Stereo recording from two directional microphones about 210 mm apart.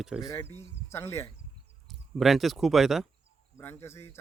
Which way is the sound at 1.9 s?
Centre (ahead or behind).